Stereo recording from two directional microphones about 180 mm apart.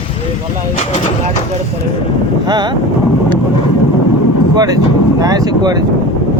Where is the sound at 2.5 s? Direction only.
25° right (ahead or behind).